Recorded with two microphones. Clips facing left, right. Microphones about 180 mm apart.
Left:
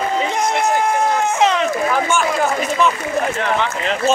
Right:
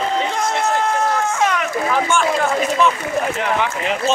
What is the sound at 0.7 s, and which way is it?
Speech, 20° left (ahead or behind).